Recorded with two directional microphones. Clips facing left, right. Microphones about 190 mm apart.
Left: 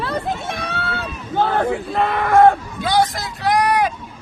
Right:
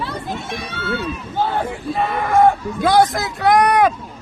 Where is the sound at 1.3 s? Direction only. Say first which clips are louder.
Left 4 dB; 55° left (ahead or behind).